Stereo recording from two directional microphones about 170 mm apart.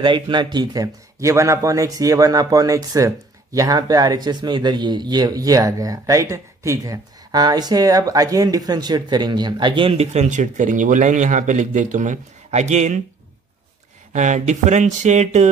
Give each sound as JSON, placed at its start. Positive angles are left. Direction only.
{"t": 0.0, "sound": "speech", "side_deg": -30}
{"t": 14.1, "sound": "speech", "side_deg": -45}